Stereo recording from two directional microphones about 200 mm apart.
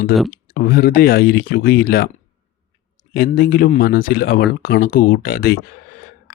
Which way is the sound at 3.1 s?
45° left (ahead or behind).